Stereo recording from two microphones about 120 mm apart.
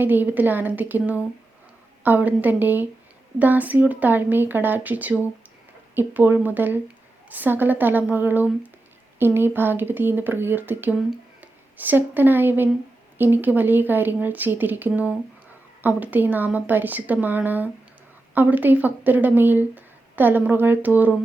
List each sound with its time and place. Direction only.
0.0 s speech: 15° right (ahead or behind)